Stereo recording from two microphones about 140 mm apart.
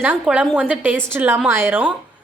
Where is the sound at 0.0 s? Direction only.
10° right (ahead or behind).